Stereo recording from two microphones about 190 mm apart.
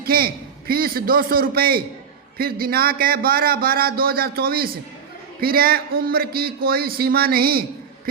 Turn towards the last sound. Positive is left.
turn(degrees=-50)  # may be behind; listen again after turning